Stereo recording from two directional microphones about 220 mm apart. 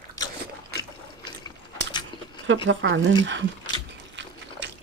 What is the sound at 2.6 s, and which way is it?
Speech, 60° right (ahead or behind).